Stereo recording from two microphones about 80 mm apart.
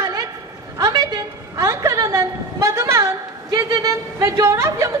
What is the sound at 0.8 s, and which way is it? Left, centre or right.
A woman's voice, right.